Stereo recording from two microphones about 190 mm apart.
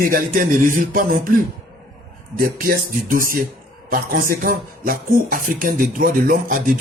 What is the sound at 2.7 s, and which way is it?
Speech, 50° right (ahead or behind).